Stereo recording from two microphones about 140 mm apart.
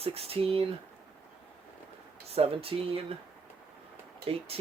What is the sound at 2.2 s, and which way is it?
Speech, 45° right (ahead or behind).